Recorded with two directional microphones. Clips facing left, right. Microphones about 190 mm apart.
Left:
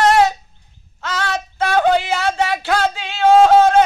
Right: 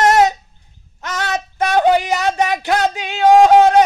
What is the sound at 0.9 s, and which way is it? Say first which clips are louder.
Child singing: even; 20° right (ahead or behind).